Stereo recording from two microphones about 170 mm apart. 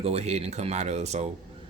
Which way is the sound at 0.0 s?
40° right (ahead or behind).